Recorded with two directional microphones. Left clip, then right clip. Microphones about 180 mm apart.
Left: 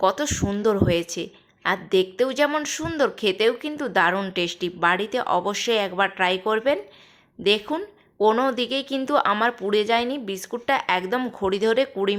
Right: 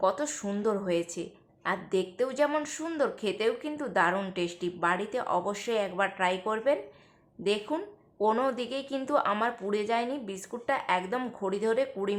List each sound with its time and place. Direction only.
0.0 s a woman's voice: 25° left (ahead or behind)